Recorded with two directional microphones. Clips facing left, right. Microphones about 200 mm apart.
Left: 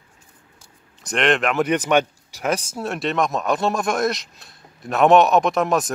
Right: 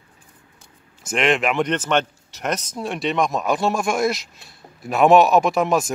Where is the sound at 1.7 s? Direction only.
10° left (ahead or behind).